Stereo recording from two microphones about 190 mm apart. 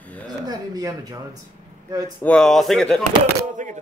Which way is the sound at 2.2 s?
5° left (ahead or behind).